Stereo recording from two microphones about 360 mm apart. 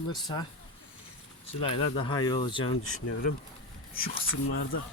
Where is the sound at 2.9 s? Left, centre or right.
Left.